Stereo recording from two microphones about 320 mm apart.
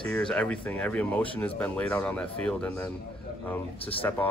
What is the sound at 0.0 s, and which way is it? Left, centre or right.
Speech, centre.